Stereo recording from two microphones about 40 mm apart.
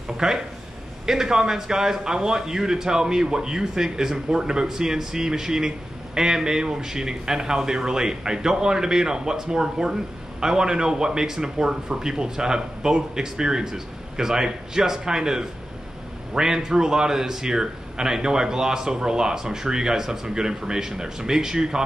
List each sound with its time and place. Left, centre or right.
0.2 s a man's voice: centre